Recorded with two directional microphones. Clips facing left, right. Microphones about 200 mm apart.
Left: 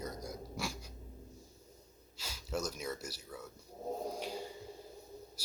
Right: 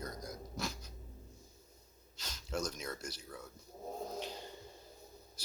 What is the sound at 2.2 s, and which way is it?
Speech, 10° left (ahead or behind).